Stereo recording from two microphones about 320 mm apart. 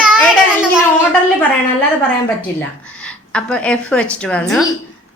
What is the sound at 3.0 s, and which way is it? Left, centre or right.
A woman's voice, centre.